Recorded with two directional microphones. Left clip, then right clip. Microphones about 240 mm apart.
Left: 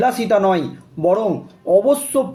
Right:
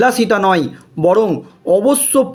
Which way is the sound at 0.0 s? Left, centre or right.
Right.